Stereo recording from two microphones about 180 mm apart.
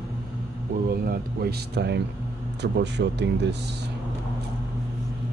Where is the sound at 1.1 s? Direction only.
60° right (ahead or behind).